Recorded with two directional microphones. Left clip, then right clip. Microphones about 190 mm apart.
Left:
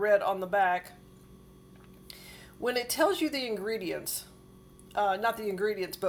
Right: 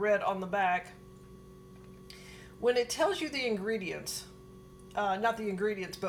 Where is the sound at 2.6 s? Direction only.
40° left (ahead or behind).